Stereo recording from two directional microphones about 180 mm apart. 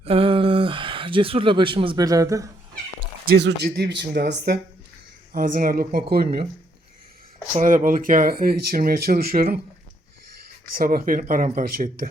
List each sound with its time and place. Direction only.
0.0 s speech: 30° right (ahead or behind)
3.2 s speech: 65° right (ahead or behind)
5.3 s a woman's voice: 50° right (ahead or behind)
7.5 s speech: 45° right (ahead or behind)
10.8 s speech: 50° right (ahead or behind)